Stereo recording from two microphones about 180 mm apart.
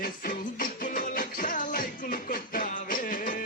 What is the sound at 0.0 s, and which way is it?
Music, 50° left (ahead or behind).